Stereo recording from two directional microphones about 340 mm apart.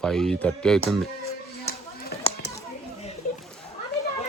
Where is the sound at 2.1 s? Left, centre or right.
Left.